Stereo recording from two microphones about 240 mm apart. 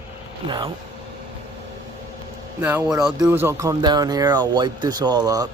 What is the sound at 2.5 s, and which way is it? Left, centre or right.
Speech, centre.